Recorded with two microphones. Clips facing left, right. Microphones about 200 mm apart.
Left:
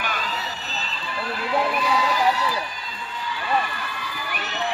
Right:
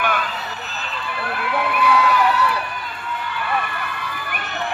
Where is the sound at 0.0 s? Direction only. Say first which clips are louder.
Right 5 dB; 55° right (ahead or behind).